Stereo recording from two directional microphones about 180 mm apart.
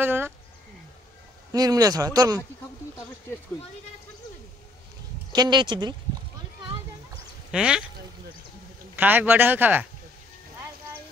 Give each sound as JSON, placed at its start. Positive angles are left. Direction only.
{"t": 0.0, "sound": "speech", "side_deg": -10}
{"t": 1.5, "sound": "speech", "side_deg": -20}
{"t": 5.3, "sound": "speech", "side_deg": -25}
{"t": 7.5, "sound": "speech", "side_deg": -5}
{"t": 8.9, "sound": "speech", "side_deg": -10}